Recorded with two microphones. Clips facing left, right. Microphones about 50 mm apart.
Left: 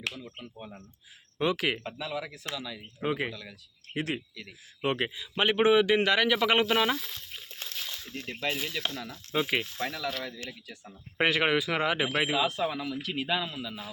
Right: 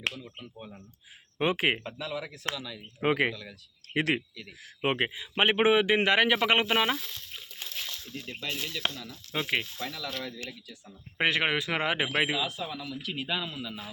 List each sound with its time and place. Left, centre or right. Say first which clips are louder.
0.3 s speech: left 1 dB; centre
1.4 s speech: right 1 dB; right
1.8 s speech: even; centre
2.5 s speech: right 1 dB; right
4.8 s a man's voice: right 1 dB; right; by 7.0 s centre
8.4 s speech: left 3 dB; centre
9.0 s speech: left 3 dB; left
9.3 s speech: left 2 dB; centre
12.5 s speech: left 5 dB; centre
13.0 s speech: left 1 dB; centre